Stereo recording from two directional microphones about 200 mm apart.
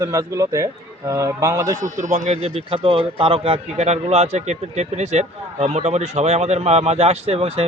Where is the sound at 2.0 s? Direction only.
35° right (ahead or behind).